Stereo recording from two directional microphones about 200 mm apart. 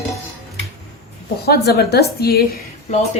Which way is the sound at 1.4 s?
50° left (ahead or behind).